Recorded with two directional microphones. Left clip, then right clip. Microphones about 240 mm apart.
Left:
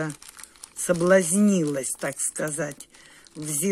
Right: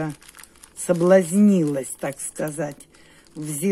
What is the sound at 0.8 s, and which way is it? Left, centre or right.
Speech, centre.